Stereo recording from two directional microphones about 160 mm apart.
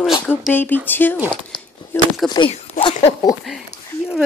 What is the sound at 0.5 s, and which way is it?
Speech, 10° left (ahead or behind).